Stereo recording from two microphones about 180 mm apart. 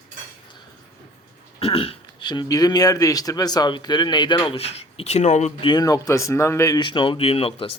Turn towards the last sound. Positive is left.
turn(degrees=30)  # may be behind; listen again after turning